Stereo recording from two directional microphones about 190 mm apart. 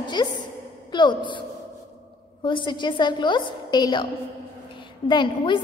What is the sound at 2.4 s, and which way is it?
A woman's voice, 25° left (ahead or behind).